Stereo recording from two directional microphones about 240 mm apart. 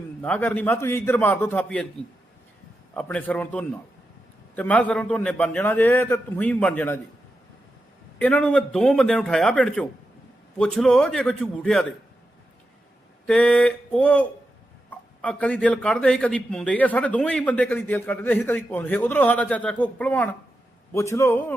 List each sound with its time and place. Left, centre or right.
0.2 s a man's voice: centre
2.9 s a man's voice: centre
8.2 s a man's voice: centre
13.2 s a man's voice: centre